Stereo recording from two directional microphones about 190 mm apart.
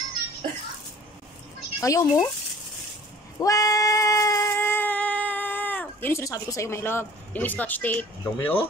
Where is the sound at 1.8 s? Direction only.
15° left (ahead or behind).